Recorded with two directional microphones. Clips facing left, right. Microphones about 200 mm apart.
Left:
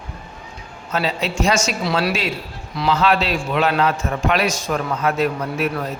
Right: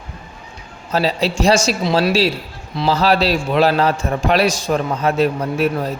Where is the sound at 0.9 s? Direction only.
35° right (ahead or behind).